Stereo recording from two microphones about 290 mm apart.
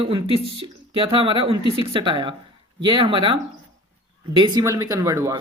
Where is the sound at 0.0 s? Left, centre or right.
Centre.